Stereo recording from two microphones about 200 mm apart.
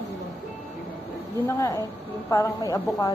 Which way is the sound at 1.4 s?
15° left (ahead or behind).